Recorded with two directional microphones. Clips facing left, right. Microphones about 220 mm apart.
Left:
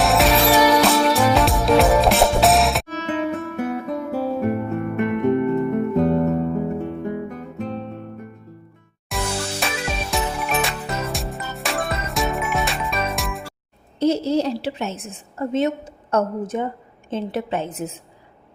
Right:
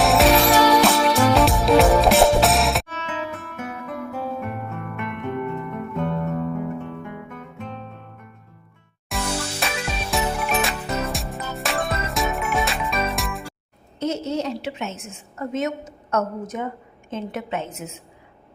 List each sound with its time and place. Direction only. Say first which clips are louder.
0.0 s music: right 1 dB; centre (ahead or behind)
2.9 s music: left 7 dB; 35° left (ahead or behind)
9.0 s music: left 1 dB; centre (ahead or behind)
14.0 s a woman's voice: left 6 dB; 30° left (ahead or behind)